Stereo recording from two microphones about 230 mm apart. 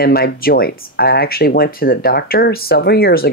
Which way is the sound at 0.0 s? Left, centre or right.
Left.